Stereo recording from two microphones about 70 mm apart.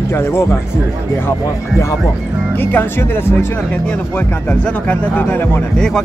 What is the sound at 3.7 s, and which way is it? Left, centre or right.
Speech, left.